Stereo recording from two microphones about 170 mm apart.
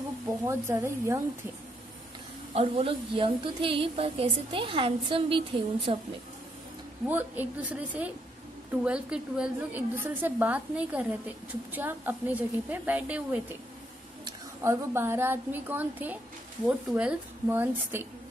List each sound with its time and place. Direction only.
0.5 s a woman's voice: 15° right (ahead or behind)
2.5 s a woman's voice: 35° right (ahead or behind)
7.1 s a woman's voice: 10° right (ahead or behind)